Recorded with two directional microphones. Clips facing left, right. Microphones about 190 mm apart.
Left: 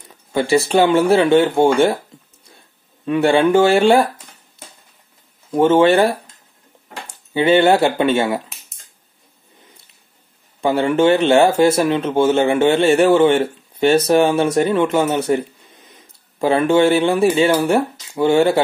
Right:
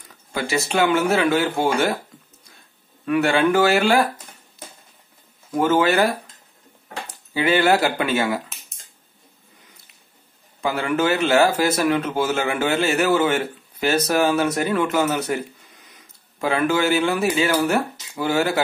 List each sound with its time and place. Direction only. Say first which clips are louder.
0.1 s speech: left 8 dB; 30° left (ahead or behind)
3.1 s speech: left 4 dB; 30° left (ahead or behind)
5.5 s speech: left 6 dB; 25° left (ahead or behind)
7.3 s speech: left 5 dB; 25° left (ahead or behind)
10.6 s speech: left 6 dB; 30° left (ahead or behind)